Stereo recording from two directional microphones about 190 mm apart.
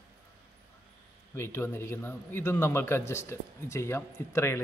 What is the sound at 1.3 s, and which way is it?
Speech, 15° left (ahead or behind).